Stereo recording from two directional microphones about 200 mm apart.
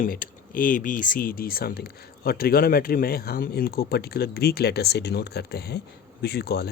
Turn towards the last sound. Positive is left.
turn(degrees=50)  # may be behind; listen again after turning